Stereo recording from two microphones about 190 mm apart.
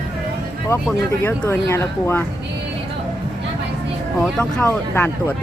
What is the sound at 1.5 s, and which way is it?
Speech, 10° left (ahead or behind).